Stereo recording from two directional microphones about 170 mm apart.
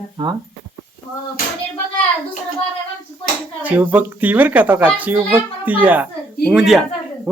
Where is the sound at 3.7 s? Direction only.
10° right (ahead or behind).